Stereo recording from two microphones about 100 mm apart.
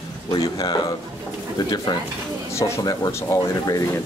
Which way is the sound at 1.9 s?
45° left (ahead or behind).